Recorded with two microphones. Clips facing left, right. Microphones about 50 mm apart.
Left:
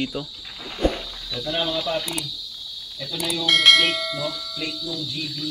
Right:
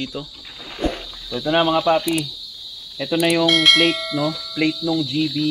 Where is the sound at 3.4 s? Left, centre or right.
Centre.